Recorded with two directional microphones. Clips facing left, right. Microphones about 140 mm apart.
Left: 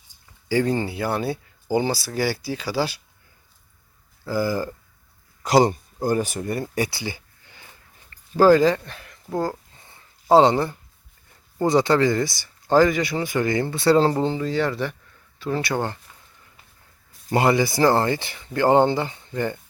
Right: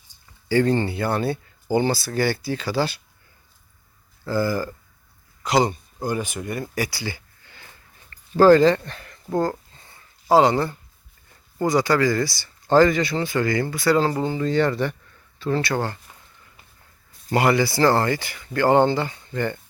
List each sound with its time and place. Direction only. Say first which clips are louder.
0.4 s speech: right 2 dB; 10° left (ahead or behind)
4.3 s speech: right 1 dB; 15° left (ahead or behind)
5.4 s speech: left 3 dB; 40° left (ahead or behind); by 7.7 s 15° left (ahead or behind)
8.1 s a sound: right 1 dB; 10° left (ahead or behind)
11.6 s speech: left 1 dB; 25° left (ahead or behind)
14.3 s speech: right 3 dB; 5° left (ahead or behind)
17.3 s speech: even; 20° left (ahead or behind)